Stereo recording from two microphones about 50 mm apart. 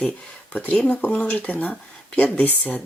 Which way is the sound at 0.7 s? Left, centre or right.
Centre.